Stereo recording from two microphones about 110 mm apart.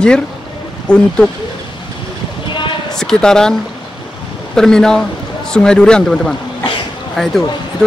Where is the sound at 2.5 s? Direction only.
45° left (ahead or behind).